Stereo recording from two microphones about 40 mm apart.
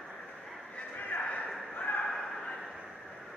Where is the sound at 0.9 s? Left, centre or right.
Left.